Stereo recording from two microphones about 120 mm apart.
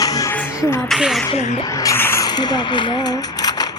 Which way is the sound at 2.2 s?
35° left (ahead or behind).